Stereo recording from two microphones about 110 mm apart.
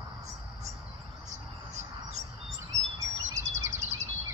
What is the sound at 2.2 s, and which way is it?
Chirp, 90° right.